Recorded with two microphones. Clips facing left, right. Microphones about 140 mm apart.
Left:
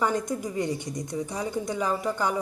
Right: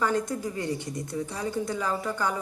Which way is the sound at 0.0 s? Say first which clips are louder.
Even; 15° left (ahead or behind).